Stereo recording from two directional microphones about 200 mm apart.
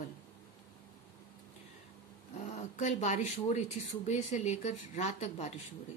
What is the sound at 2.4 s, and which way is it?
Speech, 35° left (ahead or behind).